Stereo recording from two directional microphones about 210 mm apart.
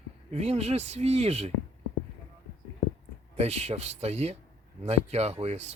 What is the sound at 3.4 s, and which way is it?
Speech, 30° right (ahead or behind).